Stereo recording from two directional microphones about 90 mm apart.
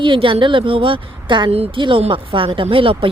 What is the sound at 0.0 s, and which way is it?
A woman's voice, 70° right (ahead or behind).